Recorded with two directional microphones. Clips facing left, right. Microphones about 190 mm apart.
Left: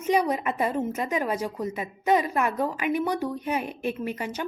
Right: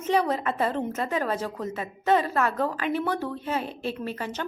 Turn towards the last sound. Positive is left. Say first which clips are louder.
# left 1 dB
turn(degrees=10)  # may be behind; listen again after turning